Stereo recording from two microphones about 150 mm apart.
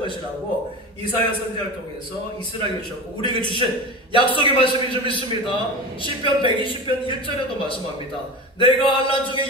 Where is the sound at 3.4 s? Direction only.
30° left (ahead or behind).